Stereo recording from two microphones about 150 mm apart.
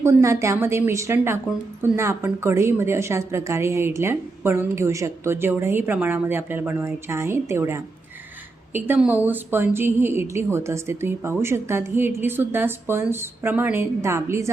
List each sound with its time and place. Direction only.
0.0 s a woman's voice: 20° right (ahead or behind)